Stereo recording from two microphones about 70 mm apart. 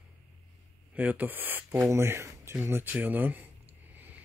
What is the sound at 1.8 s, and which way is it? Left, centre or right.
Speech, right.